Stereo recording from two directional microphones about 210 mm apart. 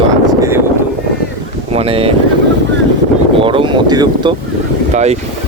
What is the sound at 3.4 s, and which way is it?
Speech, 25° right (ahead or behind).